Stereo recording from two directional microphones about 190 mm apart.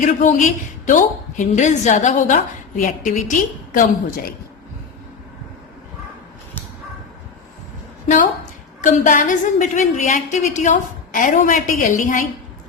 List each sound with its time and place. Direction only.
0.0 s a woman's voice: 40° left (ahead or behind)
8.0 s a woman's voice: 40° left (ahead or behind)